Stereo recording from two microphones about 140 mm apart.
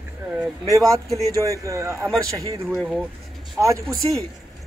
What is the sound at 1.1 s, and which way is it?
Speech, 25° right (ahead or behind).